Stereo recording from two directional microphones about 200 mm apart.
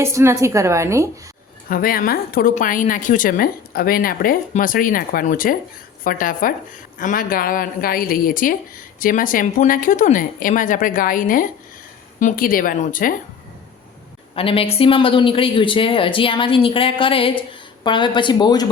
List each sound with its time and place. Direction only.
0.0 s a woman's voice: 15° right (ahead or behind)
1.7 s a woman's voice: 45° left (ahead or behind)
14.3 s speech: 30° left (ahead or behind)